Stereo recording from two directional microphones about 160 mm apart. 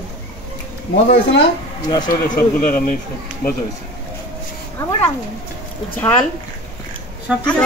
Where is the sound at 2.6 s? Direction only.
60° left (ahead or behind).